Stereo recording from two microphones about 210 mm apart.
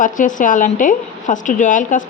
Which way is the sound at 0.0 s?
40° left (ahead or behind).